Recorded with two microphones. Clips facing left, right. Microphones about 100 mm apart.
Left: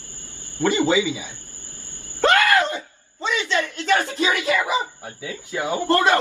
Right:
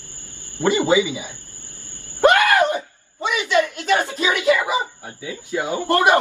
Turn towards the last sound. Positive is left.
turn(degrees=-20)  # may be behind; listen again after turning